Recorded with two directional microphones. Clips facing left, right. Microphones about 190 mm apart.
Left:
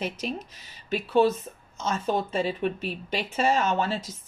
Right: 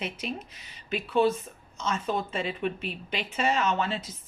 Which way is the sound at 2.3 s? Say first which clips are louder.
Left 4 dB; 40° left (ahead or behind).